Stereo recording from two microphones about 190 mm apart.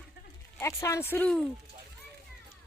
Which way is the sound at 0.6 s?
15° left (ahead or behind).